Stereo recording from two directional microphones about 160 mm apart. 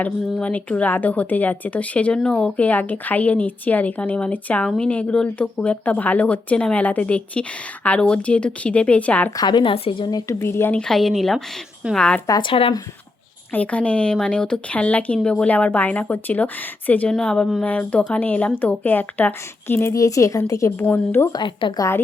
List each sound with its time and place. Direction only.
0.0 s a woman's voice: 10° left (ahead or behind)
9.4 s a woman's voice: 30° left (ahead or behind)
10.1 s a woman's voice: 20° left (ahead or behind); by 12.2 s 5° left (ahead or behind)
12.3 s a woman's voice: 30° left (ahead or behind)
13.5 s a woman's voice: 10° left (ahead or behind)
21.3 s speech: 30° left (ahead or behind)